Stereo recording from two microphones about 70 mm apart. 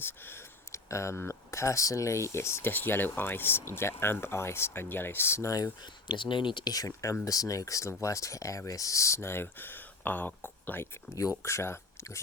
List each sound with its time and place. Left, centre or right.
0.0 s a sound: left
1.2 s speech: left
6.7 s speech: left
11.1 s speech: left